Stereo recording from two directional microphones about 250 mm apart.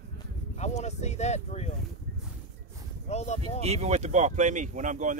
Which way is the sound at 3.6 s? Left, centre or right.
Right.